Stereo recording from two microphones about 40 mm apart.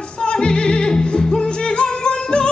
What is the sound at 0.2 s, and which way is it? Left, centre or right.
Music, left.